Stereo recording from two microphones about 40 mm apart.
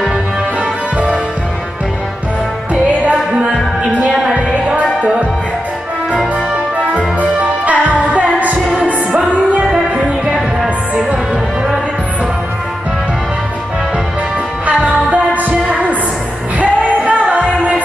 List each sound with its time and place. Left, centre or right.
2.7 s music: right
7.0 s music: right
14.7 s music: right
16.5 s music: right